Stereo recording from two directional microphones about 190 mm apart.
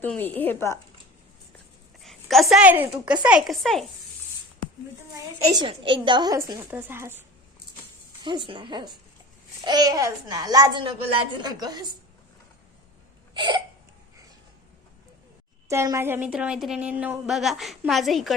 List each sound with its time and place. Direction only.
0.0 s speech: 10° left (ahead or behind)
2.0 s a woman's voice: centre (ahead or behind)
5.5 s a child's voice: 25° right (ahead or behind)
8.2 s a child's voice: 25° right (ahead or behind)
13.3 s hiccup: 25° right (ahead or behind)
15.7 s a woman's voice: 15° right (ahead or behind)